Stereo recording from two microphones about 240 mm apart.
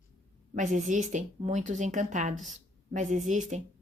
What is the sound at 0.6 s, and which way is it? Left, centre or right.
Speech, right.